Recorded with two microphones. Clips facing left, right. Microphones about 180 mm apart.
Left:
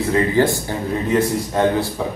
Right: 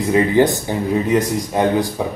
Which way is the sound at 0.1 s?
20° right (ahead or behind).